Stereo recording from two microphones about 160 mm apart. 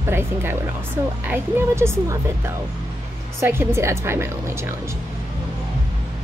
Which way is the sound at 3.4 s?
15° right (ahead or behind).